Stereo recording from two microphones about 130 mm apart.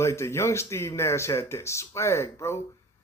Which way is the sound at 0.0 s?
20° left (ahead or behind).